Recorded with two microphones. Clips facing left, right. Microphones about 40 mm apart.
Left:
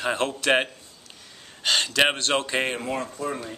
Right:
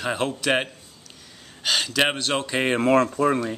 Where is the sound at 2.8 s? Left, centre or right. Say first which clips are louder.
Right 10 dB; right.